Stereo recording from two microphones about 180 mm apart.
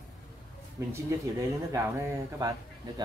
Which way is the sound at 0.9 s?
15° right (ahead or behind).